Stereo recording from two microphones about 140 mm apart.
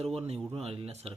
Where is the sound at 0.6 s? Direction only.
45° right (ahead or behind).